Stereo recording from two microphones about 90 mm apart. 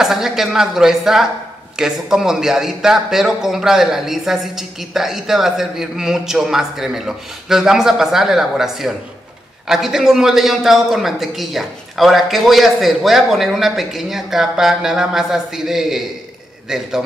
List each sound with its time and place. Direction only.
0.0 s speech: 5° right (ahead or behind)